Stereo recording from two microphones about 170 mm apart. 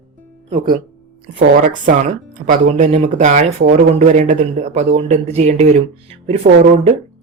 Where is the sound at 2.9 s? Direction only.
40° right (ahead or behind).